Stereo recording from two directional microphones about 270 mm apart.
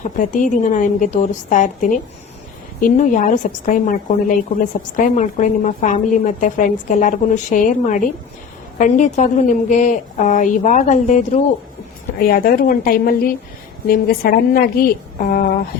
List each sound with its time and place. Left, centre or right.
0.0 s a woman's voice: left